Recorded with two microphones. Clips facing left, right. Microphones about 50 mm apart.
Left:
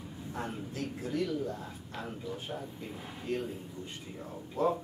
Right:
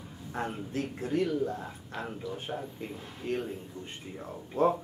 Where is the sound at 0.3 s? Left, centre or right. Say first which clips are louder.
Right 4 dB; right.